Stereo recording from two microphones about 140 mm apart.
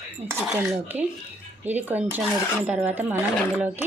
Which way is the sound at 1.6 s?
15° right (ahead or behind).